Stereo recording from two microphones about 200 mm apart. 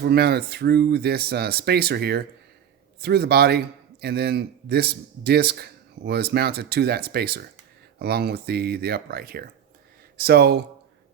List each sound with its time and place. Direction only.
0.0 s speech: 55° right (ahead or behind)